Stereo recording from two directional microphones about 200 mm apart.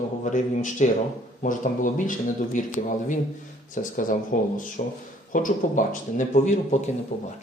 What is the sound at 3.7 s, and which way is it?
Speech, 40° left (ahead or behind).